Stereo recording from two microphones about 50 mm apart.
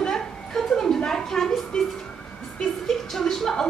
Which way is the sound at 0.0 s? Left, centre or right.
Centre.